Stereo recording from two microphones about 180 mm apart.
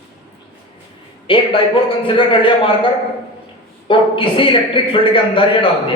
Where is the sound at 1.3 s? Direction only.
30° left (ahead or behind).